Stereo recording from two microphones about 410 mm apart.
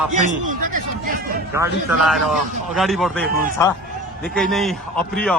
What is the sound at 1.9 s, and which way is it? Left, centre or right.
A man's voice, centre.